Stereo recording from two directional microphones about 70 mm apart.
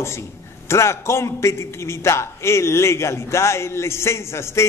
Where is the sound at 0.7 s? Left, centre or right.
Left.